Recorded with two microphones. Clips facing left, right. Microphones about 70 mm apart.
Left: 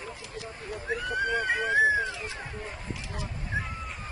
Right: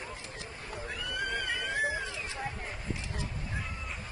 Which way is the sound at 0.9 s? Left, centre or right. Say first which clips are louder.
Left 7 dB; left.